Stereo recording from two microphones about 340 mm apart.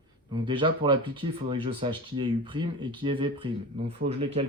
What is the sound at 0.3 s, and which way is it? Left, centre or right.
Speech, centre.